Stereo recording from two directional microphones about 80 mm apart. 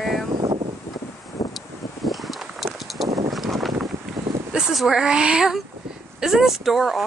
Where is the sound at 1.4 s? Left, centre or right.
Left.